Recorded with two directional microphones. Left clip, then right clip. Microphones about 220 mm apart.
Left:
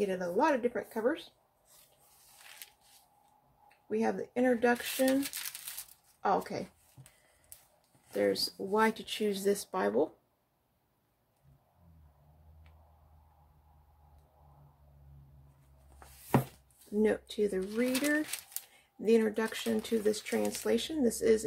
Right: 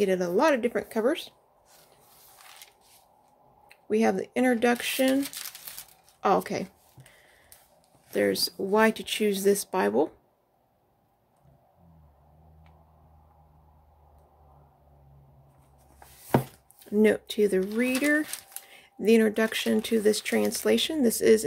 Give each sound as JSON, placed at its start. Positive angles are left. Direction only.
{"t": 0.0, "sound": "speech", "side_deg": -45}
{"t": 3.6, "sound": "speech", "side_deg": -45}
{"t": 6.2, "sound": "speech", "side_deg": -40}
{"t": 8.1, "sound": "speech", "side_deg": -35}
{"t": 17.0, "sound": "speech", "side_deg": -40}